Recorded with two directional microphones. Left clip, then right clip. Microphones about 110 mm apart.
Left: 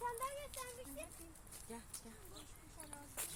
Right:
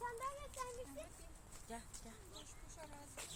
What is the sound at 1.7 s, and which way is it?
Speech, 15° right (ahead or behind).